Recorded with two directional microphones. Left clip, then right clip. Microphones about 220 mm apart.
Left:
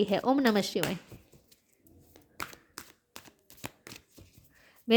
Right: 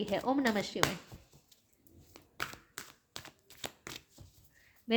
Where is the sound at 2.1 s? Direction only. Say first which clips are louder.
Even; 15° left (ahead or behind).